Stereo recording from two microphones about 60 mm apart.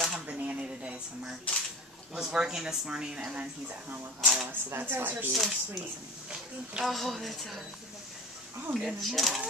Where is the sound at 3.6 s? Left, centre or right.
Right.